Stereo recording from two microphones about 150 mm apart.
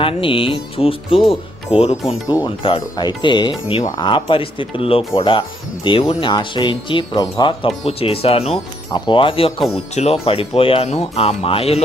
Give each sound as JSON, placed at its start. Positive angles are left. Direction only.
{"t": 0.0, "sound": "speech", "side_deg": 35}
{"t": 2.2, "sound": "speech", "side_deg": 25}